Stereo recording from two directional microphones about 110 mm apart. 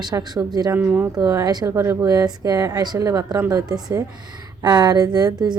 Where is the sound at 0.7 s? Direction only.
15° right (ahead or behind).